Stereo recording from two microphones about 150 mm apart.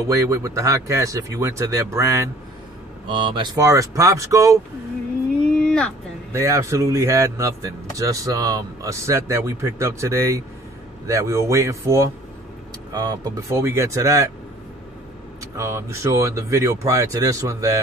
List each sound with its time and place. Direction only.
0.1 s speech: 20° right (ahead or behind)
3.1 s speech: 35° right (ahead or behind)
5.6 s a sound: 5° left (ahead or behind)
6.3 s speech: 20° right (ahead or behind)
15.5 s speech: 20° right (ahead or behind)